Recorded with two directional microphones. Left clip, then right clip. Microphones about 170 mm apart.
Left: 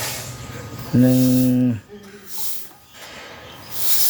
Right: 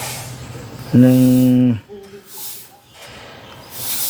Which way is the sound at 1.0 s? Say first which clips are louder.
Right 4 dB; 25° right (ahead or behind).